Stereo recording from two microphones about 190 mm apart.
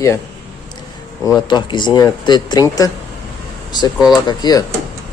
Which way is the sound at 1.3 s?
25° left (ahead or behind).